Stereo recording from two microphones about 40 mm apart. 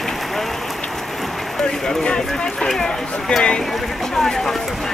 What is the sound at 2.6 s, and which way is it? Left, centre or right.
Speech, centre.